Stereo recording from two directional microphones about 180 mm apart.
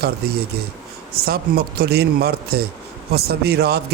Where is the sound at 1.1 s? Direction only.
55° right (ahead or behind).